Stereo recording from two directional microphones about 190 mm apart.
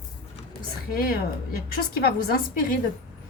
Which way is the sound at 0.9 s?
50° left (ahead or behind).